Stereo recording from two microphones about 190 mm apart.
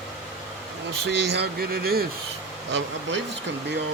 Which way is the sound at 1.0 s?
60° right (ahead or behind).